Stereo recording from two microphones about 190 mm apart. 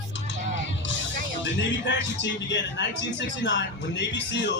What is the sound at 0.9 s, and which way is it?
Speech, 70° left (ahead or behind).